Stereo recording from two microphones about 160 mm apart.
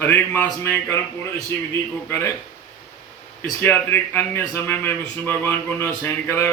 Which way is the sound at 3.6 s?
15° left (ahead or behind).